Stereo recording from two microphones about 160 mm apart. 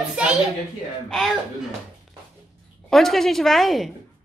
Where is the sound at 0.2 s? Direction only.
5° right (ahead or behind).